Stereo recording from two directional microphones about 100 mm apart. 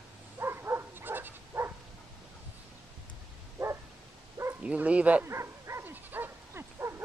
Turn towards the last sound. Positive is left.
turn(degrees=-25)  # may be behind; listen again after turning